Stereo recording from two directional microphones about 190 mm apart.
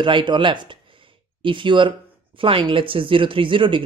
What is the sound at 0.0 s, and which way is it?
Speech, 25° right (ahead or behind).